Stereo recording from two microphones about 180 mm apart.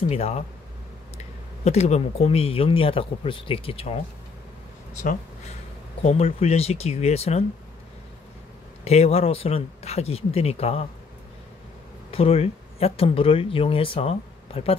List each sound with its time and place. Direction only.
0.1 s speech: 35° left (ahead or behind)
6.0 s speech: 35° left (ahead or behind)
8.8 s speech: 35° left (ahead or behind)
12.1 s speech: 30° left (ahead or behind)